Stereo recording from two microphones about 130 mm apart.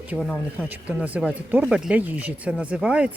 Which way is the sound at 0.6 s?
10° right (ahead or behind).